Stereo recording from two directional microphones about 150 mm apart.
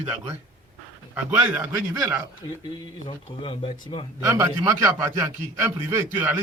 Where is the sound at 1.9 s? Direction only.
25° right (ahead or behind).